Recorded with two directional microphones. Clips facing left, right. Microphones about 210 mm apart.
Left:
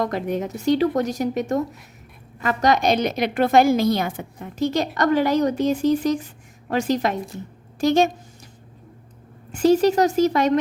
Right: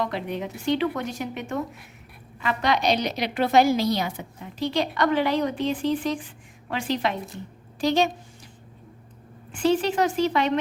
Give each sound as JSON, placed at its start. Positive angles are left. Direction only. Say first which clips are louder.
{"t": 0.0, "sound": "a woman's voice", "louder": "left 5 dB", "side_deg": 45}
{"t": 9.5, "sound": "speech", "louder": "left 6 dB", "side_deg": 40}